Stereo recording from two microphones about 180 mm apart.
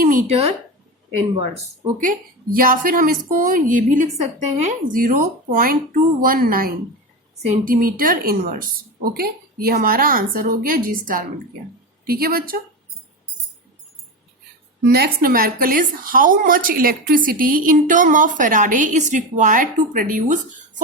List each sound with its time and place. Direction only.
0.0 s a sound: 50° right (ahead or behind)
2.0 s a woman's voice: 50° right (ahead or behind)
14.8 s a woman's voice: 60° right (ahead or behind); by 20.8 s 45° right (ahead or behind)